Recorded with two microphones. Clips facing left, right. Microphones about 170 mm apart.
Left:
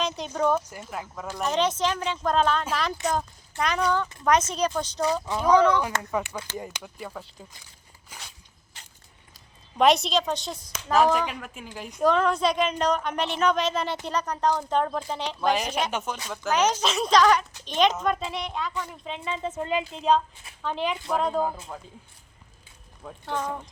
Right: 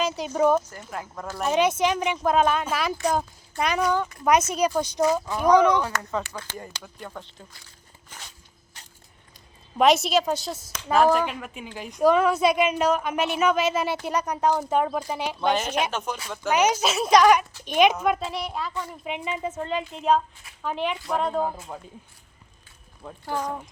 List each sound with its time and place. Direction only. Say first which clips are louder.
0.0 s speech: right 4 dB; 5° right (ahead or behind)
0.7 s speech: even; 5° left (ahead or behind)
1.5 s speech: right 3 dB; 10° right (ahead or behind)
6.0 s speech: left 1 dB; 15° left (ahead or behind)
8.1 s walk: even; 10° left (ahead or behind)
9.7 s speech: right 1 dB; 5° right (ahead or behind)
18.7 s speech: right 2 dB; 15° right (ahead or behind)
21.7 s speech: right 1 dB; 15° right (ahead or behind)
23.0 s speech: right 1 dB; centre (ahead or behind)